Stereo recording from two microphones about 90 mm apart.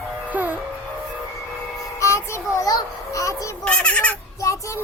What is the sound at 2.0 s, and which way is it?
Child singing, 30° left (ahead or behind).